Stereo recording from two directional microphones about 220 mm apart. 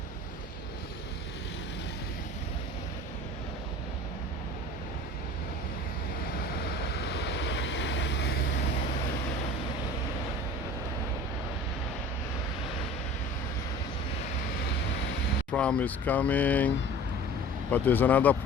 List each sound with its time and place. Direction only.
6.6 s waves: 45° left (ahead or behind)
15.5 s speech: 5° left (ahead or behind)